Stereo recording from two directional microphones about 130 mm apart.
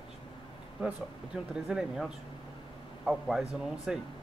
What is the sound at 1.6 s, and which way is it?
Speech, 5° right (ahead or behind).